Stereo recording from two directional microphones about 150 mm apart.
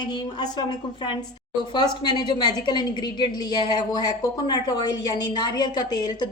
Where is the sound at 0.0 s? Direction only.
30° left (ahead or behind).